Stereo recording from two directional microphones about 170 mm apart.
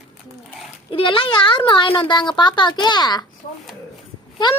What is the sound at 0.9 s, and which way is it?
A woman's voice, 30° left (ahead or behind).